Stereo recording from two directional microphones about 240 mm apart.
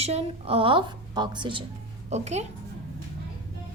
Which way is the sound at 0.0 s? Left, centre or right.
Right.